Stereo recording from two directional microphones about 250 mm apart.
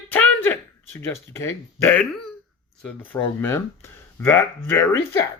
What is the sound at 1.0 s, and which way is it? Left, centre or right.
Speech, centre.